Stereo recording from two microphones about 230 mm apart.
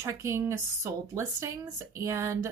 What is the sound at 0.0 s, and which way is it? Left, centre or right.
A woman's voice, centre.